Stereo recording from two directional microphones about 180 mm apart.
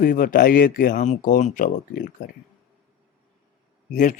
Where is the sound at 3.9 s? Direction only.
45° left (ahead or behind).